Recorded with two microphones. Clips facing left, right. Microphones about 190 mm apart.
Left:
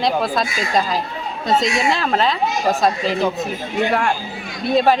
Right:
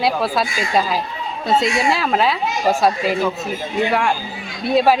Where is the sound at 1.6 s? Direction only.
5° right (ahead or behind).